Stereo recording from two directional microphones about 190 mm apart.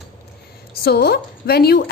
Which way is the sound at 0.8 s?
55° left (ahead or behind).